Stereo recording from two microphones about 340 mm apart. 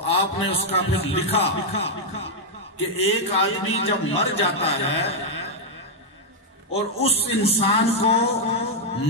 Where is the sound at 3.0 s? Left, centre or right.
Centre.